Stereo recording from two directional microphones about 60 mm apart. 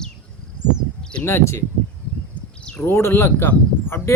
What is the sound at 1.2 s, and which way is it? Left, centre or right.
Speech, left.